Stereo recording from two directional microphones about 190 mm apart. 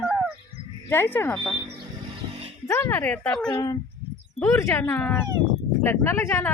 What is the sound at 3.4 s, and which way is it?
Speech, 20° left (ahead or behind).